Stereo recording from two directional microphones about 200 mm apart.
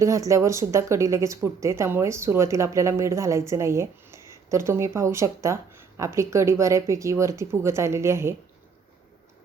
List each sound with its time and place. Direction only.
0.0 s speech: 15° right (ahead or behind)